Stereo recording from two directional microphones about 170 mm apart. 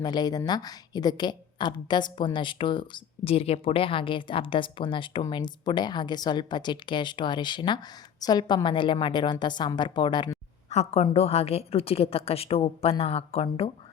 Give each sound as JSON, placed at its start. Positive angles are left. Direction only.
{"t": 0.0, "sound": "a woman's voice", "side_deg": 25}
{"t": 10.7, "sound": "a woman's voice", "side_deg": 40}